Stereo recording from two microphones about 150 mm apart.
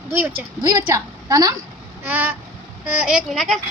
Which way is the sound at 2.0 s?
10° right (ahead or behind).